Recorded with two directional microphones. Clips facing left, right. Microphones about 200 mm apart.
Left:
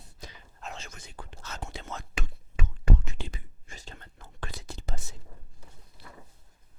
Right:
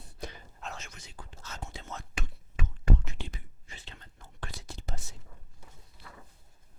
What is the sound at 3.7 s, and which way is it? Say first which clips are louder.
Whispering: left 4 dB; 45° left (ahead or behind).